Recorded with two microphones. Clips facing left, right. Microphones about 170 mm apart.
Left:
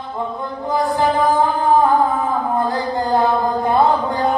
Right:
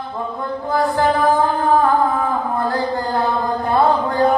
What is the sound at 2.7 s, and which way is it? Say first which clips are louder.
Mantra: left 1 dB; 20° left (ahead or behind).